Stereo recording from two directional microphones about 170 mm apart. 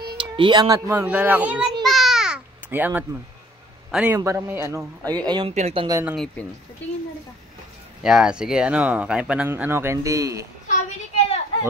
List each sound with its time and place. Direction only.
0.0 s a child's voice: 30° right (ahead or behind); by 1.7 s 10° right (ahead or behind)
1.8 s babbling: centre (ahead or behind)
3.9 s a man's voice: 10° right (ahead or behind); by 5.5 s 25° right (ahead or behind)
5.5 s speech: 40° right (ahead or behind)
6.0 s a child's voice: centre (ahead or behind)
8.0 s speech: 5° right (ahead or behind); by 10.4 s 20° right (ahead or behind)